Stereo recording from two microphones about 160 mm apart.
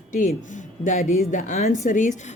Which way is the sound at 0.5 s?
50° left (ahead or behind).